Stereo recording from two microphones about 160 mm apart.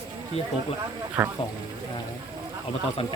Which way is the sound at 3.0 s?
35° left (ahead or behind).